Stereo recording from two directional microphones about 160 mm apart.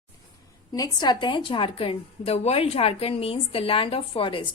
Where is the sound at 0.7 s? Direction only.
25° left (ahead or behind).